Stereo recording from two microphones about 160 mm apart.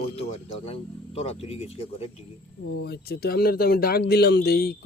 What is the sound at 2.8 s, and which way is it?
Speech, 85° left.